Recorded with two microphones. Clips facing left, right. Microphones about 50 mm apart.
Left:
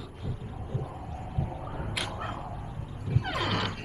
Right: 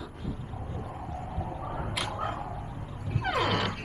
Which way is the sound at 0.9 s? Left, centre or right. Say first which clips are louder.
Right 1 dB; centre.